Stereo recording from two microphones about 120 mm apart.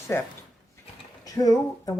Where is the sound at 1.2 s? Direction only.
30° left (ahead or behind).